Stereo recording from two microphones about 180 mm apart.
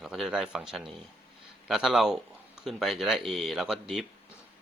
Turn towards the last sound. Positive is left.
turn(degrees=0)  # may be behind; listen again after turning